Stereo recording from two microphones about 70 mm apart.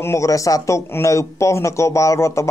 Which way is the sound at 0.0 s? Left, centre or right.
Left.